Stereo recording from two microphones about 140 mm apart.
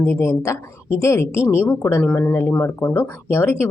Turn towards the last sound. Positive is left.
turn(degrees=15)  # may be behind; listen again after turning